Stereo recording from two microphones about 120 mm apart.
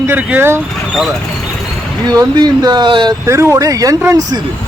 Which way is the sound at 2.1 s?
35° right (ahead or behind).